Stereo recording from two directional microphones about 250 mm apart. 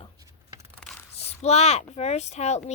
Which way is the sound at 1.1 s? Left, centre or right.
Left.